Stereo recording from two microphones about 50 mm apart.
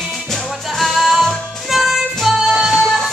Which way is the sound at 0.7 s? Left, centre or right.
Centre.